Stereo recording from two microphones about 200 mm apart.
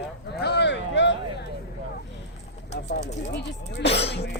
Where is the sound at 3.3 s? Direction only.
60° left (ahead or behind).